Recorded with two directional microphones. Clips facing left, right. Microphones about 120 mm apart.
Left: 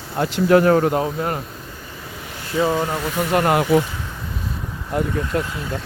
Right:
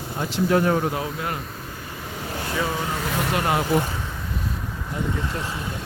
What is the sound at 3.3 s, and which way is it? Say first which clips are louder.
Speech: left 7 dB; 55° left (ahead or behind).